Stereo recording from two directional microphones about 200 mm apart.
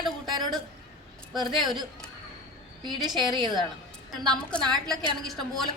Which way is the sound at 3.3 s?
20° right (ahead or behind).